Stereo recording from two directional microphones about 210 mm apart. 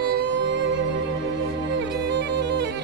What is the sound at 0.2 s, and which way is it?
Music, 60° right (ahead or behind).